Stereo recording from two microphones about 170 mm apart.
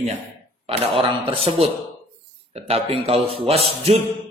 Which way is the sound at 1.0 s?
35° right (ahead or behind).